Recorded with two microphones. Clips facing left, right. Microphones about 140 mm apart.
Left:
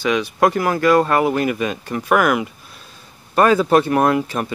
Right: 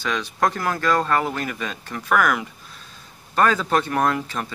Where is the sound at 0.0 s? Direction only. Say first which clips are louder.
Left 6 dB; 15° left (ahead or behind).